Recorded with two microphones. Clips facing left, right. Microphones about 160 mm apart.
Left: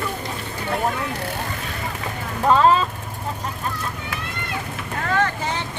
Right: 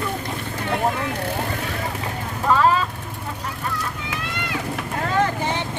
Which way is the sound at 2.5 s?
25° left (ahead or behind).